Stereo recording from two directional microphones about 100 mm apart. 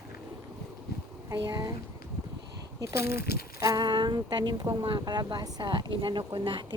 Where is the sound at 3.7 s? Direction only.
45° right (ahead or behind).